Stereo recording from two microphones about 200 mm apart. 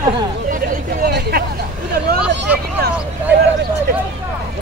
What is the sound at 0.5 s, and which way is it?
Hubbub, 45° right (ahead or behind).